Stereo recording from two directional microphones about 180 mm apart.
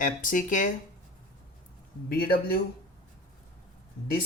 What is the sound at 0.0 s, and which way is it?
Speech, 45° left (ahead or behind).